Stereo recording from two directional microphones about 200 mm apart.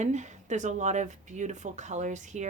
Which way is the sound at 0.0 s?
35° right (ahead or behind).